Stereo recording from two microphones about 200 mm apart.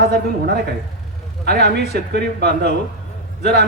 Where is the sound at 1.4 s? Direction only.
55° right (ahead or behind).